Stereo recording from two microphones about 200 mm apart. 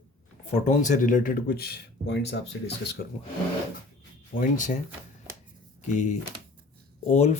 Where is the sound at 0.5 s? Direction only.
40° left (ahead or behind).